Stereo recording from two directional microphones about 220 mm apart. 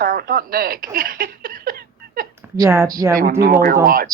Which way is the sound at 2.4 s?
5° right (ahead or behind).